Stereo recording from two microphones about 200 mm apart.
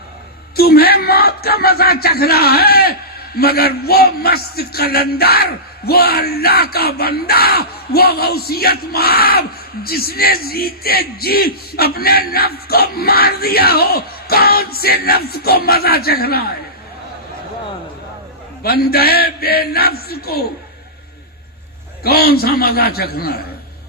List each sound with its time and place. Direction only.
0.5 s speech: 50° left (ahead or behind)
18.6 s speech: 50° left (ahead or behind)
22.0 s speech: 50° left (ahead or behind)